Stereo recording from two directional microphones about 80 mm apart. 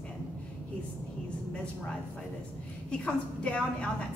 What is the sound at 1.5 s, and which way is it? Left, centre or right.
A woman's voice, centre.